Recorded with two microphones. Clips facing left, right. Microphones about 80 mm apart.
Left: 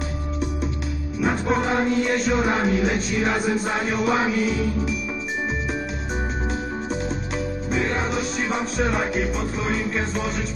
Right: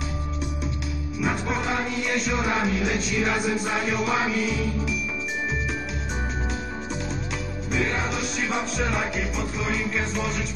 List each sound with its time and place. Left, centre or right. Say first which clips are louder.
1.2 s music: left 5 dB; left
7.7 s music: left 2 dB; left